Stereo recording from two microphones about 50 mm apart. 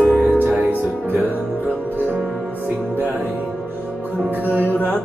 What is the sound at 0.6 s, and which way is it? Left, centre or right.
Music, right.